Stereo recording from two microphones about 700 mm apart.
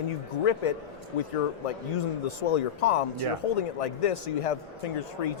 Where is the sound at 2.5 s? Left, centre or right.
Left.